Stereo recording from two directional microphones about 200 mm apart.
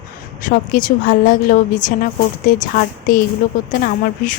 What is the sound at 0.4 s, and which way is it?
Speech, 40° left (ahead or behind).